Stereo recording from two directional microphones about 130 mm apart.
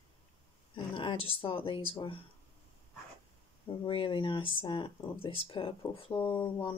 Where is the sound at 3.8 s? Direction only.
45° left (ahead or behind).